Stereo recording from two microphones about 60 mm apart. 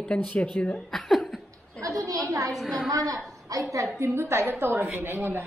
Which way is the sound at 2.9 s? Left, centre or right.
Right.